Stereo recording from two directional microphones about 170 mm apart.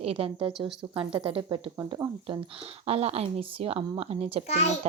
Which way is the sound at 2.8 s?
40° right (ahead or behind).